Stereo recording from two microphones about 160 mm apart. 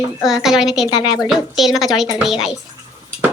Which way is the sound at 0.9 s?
25° left (ahead or behind).